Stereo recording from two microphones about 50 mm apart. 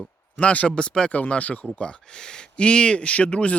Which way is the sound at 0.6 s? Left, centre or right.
Centre.